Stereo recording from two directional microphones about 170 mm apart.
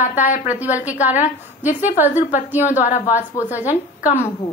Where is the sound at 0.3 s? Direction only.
45° left (ahead or behind).